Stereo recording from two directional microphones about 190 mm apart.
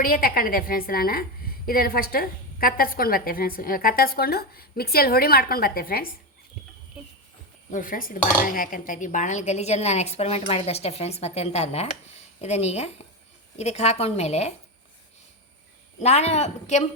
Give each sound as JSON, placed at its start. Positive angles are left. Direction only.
{"t": 0.0, "sound": "a woman's voice", "side_deg": 50}
{"t": 7.7, "sound": "speech", "side_deg": 45}
{"t": 16.0, "sound": "speech", "side_deg": 35}